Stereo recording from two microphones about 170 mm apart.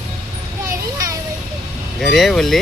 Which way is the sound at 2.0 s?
Centre (ahead or behind).